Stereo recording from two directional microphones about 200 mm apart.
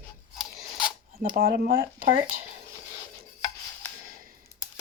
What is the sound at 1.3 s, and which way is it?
Speech, 50° right (ahead or behind).